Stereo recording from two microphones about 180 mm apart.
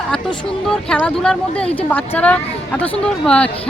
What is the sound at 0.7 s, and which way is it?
A woman's voice, 5° left (ahead or behind).